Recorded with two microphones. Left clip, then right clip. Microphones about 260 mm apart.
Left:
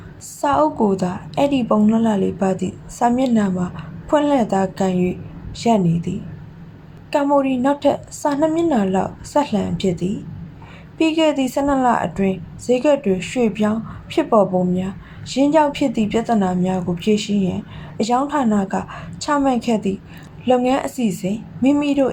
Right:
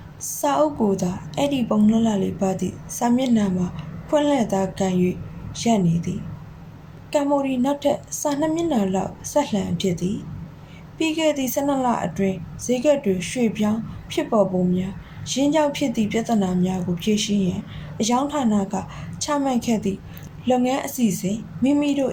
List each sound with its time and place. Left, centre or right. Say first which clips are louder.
0.4 s a woman's voice: left 3 dB; centre
7.1 s a woman's voice: left 4 dB; centre